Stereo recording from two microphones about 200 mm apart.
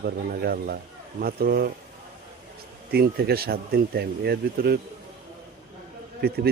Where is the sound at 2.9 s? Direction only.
50° right (ahead or behind).